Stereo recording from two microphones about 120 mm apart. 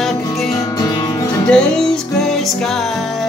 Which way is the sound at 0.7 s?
30° left (ahead or behind).